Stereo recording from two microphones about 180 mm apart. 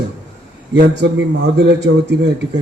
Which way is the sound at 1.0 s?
70° right (ahead or behind).